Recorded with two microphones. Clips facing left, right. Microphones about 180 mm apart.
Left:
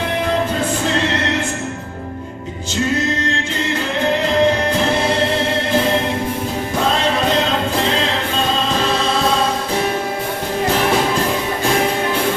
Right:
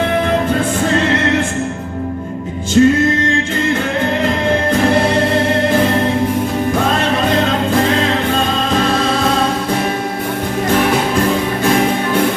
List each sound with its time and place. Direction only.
2.8 s music: 50° right (ahead or behind)